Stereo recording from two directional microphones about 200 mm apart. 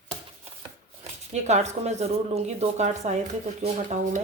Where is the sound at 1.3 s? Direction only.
35° right (ahead or behind).